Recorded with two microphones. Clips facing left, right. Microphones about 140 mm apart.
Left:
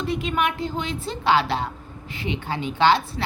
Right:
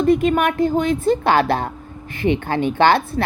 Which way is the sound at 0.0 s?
50° right (ahead or behind).